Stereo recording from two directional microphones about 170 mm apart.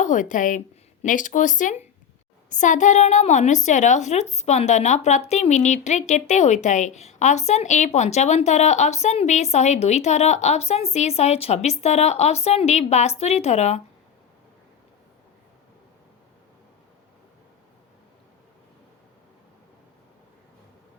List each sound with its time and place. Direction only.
0.0 s a woman's voice: 45° left (ahead or behind)